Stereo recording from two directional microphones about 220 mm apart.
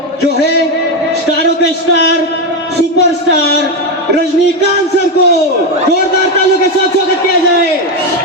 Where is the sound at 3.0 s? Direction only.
50° left (ahead or behind).